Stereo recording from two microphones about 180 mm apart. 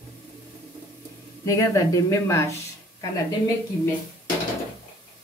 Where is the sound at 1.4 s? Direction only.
20° left (ahead or behind).